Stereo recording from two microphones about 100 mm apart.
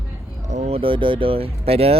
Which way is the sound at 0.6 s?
70° right (ahead or behind).